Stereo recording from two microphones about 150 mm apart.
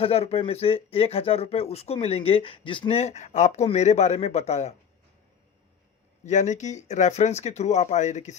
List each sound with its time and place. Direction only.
0.0 s speech: 45° left (ahead or behind)
6.2 s speech: 55° left (ahead or behind)